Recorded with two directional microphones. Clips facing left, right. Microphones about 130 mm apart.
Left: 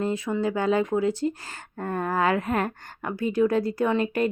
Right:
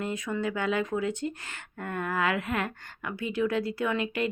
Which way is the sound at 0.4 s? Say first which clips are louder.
Left 6 dB; 35° left (ahead or behind).